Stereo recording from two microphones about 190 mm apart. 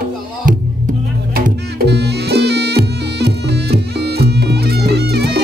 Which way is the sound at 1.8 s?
60° right (ahead or behind).